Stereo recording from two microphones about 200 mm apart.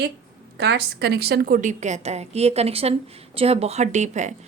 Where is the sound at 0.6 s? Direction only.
55° right (ahead or behind).